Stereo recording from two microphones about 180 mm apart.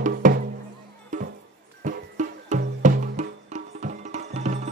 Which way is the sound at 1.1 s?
45° right (ahead or behind).